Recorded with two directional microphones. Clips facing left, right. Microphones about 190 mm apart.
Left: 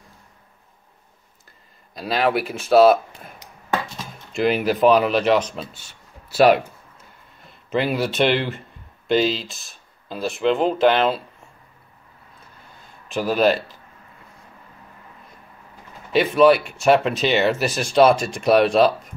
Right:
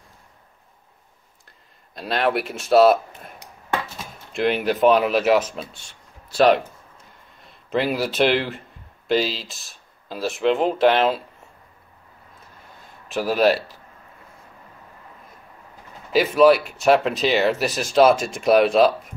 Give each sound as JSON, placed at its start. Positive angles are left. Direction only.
{"t": 2.0, "sound": "speech", "side_deg": 0}
{"t": 7.7, "sound": "speech", "side_deg": 0}
{"t": 13.1, "sound": "speech", "side_deg": -5}
{"t": 16.1, "sound": "speech", "side_deg": 0}